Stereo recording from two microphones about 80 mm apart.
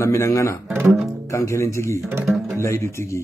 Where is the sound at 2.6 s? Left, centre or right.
Left.